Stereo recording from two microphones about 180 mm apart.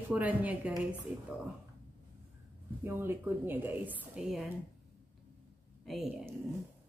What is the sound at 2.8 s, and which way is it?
A woman's voice, 10° right (ahead or behind).